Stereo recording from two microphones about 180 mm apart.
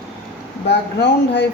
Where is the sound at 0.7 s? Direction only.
70° left (ahead or behind).